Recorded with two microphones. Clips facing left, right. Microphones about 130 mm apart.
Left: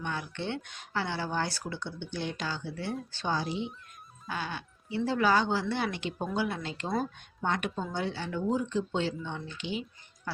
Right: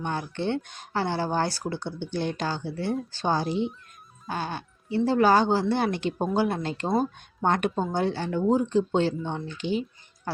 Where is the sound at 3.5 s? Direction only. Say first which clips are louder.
Right 7 dB; 5° left (ahead or behind).